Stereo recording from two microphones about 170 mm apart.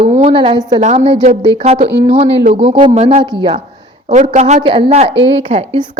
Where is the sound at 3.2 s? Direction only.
25° right (ahead or behind).